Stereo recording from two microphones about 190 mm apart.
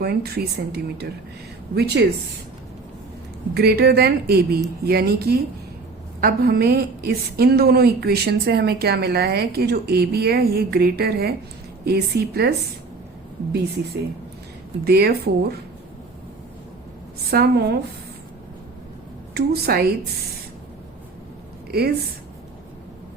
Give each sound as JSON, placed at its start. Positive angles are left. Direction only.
{"t": 0.0, "sound": "a woman's voice", "side_deg": -55}
{"t": 3.5, "sound": "a woman's voice", "side_deg": -55}
{"t": 14.8, "sound": "a woman's voice", "side_deg": -55}
{"t": 17.3, "sound": "a woman's voice", "side_deg": -55}
{"t": 19.3, "sound": "a woman's voice", "side_deg": -55}
{"t": 21.7, "sound": "a woman's voice", "side_deg": -55}